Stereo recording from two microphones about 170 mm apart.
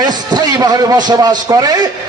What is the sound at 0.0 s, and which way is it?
A man's voice, 20° right (ahead or behind).